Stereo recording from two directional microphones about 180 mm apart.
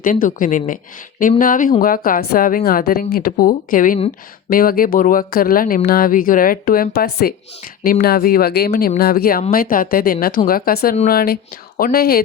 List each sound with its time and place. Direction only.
0.0 s speech: 50° left (ahead or behind)